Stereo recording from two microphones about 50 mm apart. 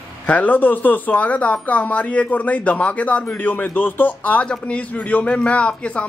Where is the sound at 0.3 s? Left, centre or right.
Left.